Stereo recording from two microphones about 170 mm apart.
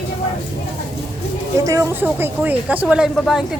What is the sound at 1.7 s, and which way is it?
Speech, 15° right (ahead or behind).